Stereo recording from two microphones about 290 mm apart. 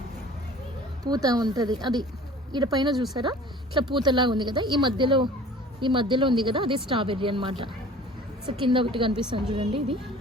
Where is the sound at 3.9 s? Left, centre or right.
Centre.